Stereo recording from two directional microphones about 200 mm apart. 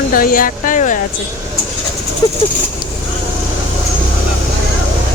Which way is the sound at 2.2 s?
20° left (ahead or behind).